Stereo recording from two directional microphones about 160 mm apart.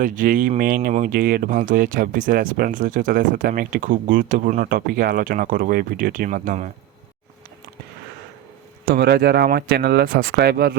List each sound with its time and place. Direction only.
0.0 s speech: 55° right (ahead or behind)
8.9 s speech: 85° right